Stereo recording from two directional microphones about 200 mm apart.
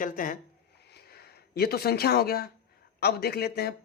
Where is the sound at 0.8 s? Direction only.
55° left (ahead or behind).